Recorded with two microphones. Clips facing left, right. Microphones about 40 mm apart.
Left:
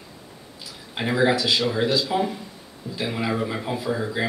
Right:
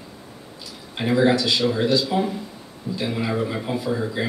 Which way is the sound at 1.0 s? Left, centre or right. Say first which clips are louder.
Right 2 dB; centre.